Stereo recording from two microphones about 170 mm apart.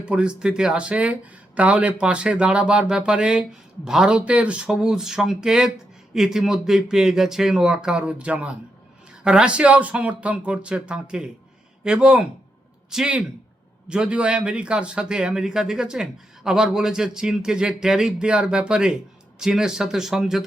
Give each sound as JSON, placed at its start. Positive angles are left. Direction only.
{"t": 0.0, "sound": "speech", "side_deg": -5}